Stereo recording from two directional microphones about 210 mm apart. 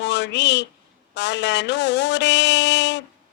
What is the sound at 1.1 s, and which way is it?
A woman's voice, 55° left (ahead or behind).